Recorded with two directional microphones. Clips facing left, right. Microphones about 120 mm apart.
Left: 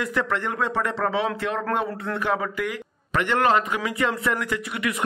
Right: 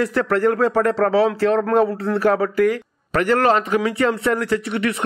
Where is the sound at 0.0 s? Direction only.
40° right (ahead or behind).